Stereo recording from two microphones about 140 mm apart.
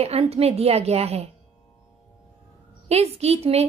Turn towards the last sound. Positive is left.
turn(degrees=-50)  # may be behind; listen again after turning